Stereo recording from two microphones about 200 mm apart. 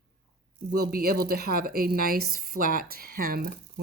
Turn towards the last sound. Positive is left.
turn(degrees=-45)  # may be behind; listen again after turning